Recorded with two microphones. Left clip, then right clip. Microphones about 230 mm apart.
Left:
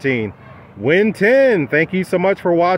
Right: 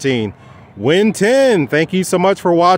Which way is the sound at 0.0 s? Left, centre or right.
Right.